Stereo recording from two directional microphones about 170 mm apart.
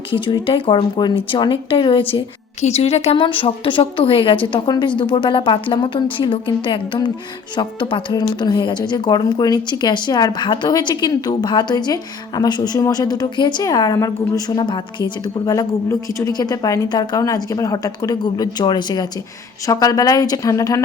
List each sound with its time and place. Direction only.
0.1 s a woman's voice: 30° left (ahead or behind)